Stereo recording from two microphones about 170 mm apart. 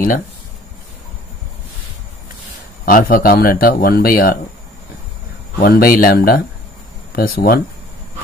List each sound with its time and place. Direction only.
2.8 s speech: 55° left (ahead or behind)
5.6 s speech: 60° left (ahead or behind)